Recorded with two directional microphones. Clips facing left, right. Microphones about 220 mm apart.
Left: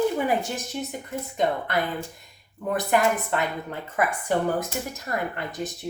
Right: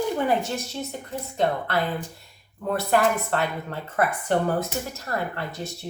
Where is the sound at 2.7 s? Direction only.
15° left (ahead or behind).